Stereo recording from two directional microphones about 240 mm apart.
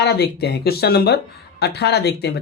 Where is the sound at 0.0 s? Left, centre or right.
Left.